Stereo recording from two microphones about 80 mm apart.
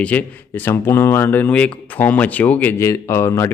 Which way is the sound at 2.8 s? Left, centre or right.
Left.